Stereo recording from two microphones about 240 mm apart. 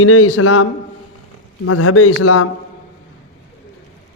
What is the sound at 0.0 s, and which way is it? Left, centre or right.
A man's voice, left.